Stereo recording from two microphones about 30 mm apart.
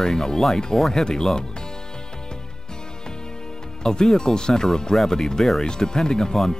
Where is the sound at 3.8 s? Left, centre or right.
Left.